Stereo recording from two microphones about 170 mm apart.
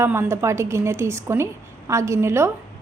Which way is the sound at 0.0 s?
15° right (ahead or behind).